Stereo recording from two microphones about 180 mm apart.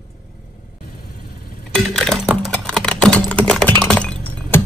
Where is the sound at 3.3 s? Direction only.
5° left (ahead or behind).